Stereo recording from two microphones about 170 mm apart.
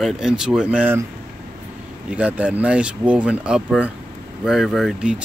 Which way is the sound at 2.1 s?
10° right (ahead or behind).